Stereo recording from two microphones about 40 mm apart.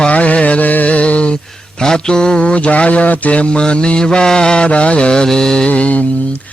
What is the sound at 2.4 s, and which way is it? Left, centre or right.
Mantra, left.